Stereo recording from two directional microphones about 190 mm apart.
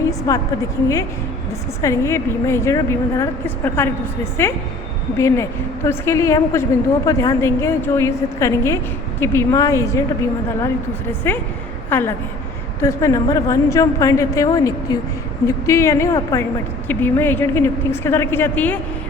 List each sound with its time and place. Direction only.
0.0 s a sound: 15° left (ahead or behind)
1.8 s a woman's voice: 15° left (ahead or behind)
11.3 s a woman's voice: 10° left (ahead or behind)